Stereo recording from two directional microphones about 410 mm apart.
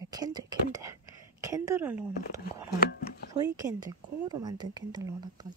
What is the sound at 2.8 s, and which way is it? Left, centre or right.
Speech, left.